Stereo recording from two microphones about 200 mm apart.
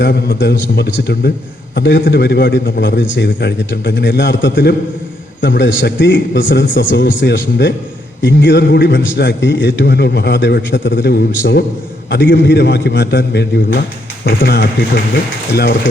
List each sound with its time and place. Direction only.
0.0 s a man's voice: 55° left (ahead or behind)